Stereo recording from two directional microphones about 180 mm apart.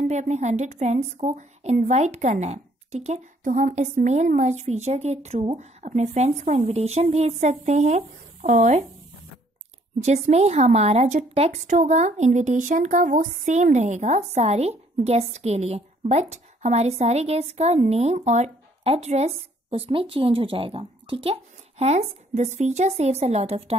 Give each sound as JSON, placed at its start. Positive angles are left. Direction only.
{"t": 0.1, "sound": "a woman's voice", "side_deg": -40}
{"t": 9.9, "sound": "a woman's voice", "side_deg": -40}